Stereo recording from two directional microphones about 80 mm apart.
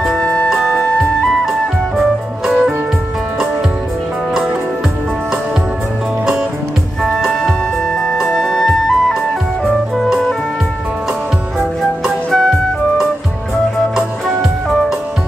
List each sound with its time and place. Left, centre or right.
0.2 s music: centre
0.5 s music: centre
2.0 s music: centre
4.3 s music: centre
7.0 s music: centre
12.3 s music: centre